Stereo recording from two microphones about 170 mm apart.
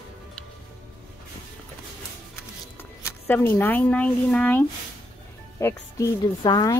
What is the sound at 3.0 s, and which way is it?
Speech, 10° left (ahead or behind).